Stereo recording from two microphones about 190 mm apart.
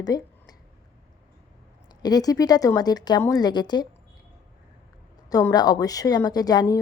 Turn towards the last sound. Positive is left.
turn(degrees=20)  # may be behind; listen again after turning